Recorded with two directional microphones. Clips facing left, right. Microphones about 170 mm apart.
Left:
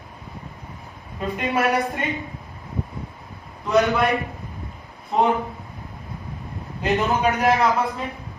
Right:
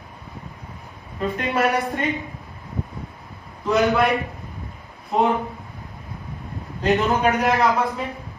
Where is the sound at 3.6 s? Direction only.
Centre (ahead or behind).